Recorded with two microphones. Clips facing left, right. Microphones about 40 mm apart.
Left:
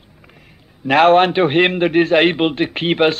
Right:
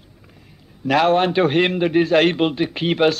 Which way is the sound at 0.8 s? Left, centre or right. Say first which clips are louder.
Left 5 dB; left.